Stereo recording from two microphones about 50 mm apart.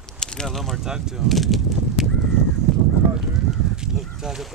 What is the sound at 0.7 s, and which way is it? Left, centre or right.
Speech, centre.